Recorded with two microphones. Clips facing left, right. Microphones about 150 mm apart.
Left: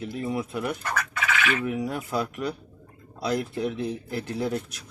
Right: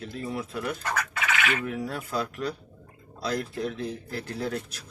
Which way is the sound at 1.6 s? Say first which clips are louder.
Left 3 dB; 15° left (ahead or behind).